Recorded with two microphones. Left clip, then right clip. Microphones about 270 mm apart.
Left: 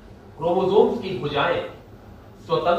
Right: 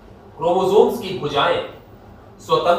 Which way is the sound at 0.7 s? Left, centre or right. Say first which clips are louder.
Right 3 dB; centre.